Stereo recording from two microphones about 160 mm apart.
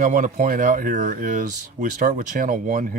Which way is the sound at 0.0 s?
55° right (ahead or behind).